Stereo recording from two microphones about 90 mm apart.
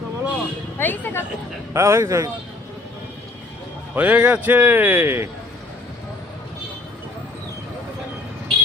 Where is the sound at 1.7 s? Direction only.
30° right (ahead or behind).